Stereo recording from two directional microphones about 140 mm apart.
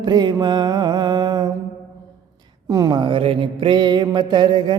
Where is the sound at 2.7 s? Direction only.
30° right (ahead or behind).